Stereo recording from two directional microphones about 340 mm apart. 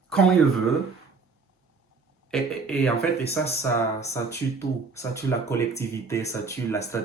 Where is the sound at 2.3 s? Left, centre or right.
Centre.